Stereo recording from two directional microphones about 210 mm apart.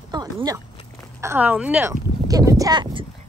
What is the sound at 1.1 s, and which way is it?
Speech, 10° right (ahead or behind).